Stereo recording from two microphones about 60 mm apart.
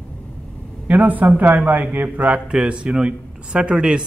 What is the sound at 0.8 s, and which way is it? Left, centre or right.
A man's voice, right.